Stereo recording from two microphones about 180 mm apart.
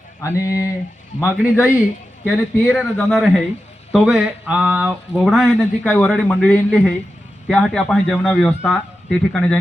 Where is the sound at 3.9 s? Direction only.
5° right (ahead or behind).